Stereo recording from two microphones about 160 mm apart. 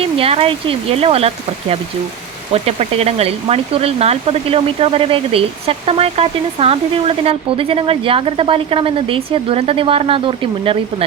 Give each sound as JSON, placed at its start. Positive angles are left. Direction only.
{"t": 0.0, "sound": "speech", "side_deg": -35}
{"t": 2.5, "sound": "speech", "side_deg": -40}